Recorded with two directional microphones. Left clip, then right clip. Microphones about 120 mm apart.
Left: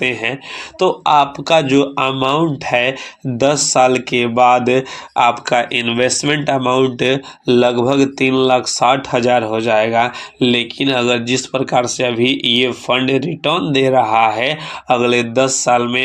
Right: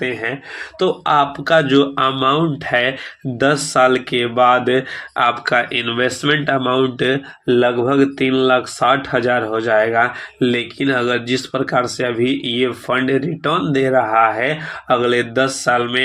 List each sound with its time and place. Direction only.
0.9 s speech: 20° left (ahead or behind)
7.6 s speech: 30° left (ahead or behind); by 13.8 s 10° left (ahead or behind)
13.8 s speech: 45° left (ahead or behind)
14.8 s speech: 20° left (ahead or behind)